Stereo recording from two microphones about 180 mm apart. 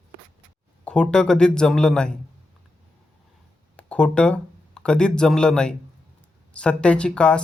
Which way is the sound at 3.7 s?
5° left (ahead or behind).